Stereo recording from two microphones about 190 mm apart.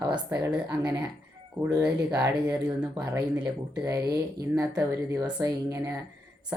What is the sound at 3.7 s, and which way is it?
Speech, 20° right (ahead or behind).